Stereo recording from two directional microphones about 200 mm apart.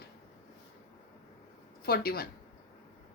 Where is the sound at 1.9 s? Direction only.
50° left (ahead or behind).